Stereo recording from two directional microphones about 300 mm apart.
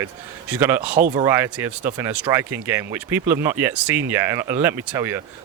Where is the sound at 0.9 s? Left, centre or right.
Right.